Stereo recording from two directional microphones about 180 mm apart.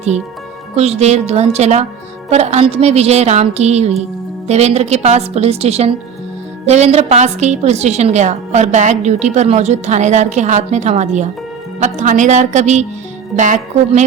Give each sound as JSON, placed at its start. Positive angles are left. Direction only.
{"t": 0.8, "sound": "a woman's voice", "side_deg": -35}